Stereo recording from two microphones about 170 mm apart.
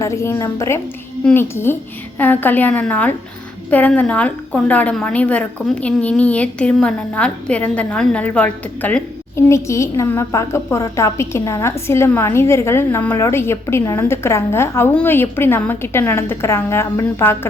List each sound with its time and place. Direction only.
0.0 s a woman's voice: 15° left (ahead or behind)